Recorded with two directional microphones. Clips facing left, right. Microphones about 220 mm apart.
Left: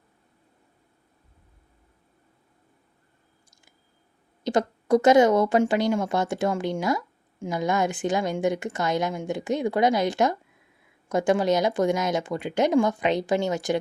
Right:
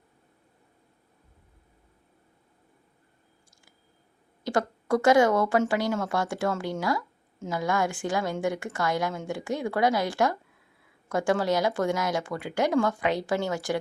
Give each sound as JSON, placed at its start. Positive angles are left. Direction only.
{"t": 4.4, "sound": "a woman's voice", "side_deg": 20}